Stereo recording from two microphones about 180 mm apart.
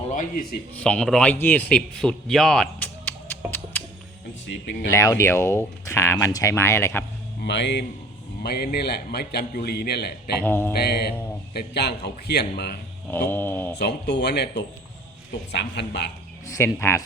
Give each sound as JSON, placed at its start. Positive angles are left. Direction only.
{"t": 0.8, "sound": "a man's voice", "side_deg": 5}
{"t": 3.5, "sound": "music", "side_deg": 10}
{"t": 4.4, "sound": "speech", "side_deg": 85}
{"t": 4.9, "sound": "speech", "side_deg": 15}
{"t": 7.4, "sound": "speech", "side_deg": 75}
{"t": 8.4, "sound": "a man's voice", "side_deg": 60}
{"t": 10.4, "sound": "speech", "side_deg": 10}
{"t": 10.8, "sound": "a man's voice", "side_deg": 60}
{"t": 13.1, "sound": "speech", "side_deg": 10}
{"t": 13.7, "sound": "speech", "side_deg": 65}
{"t": 16.7, "sound": "speech", "side_deg": 15}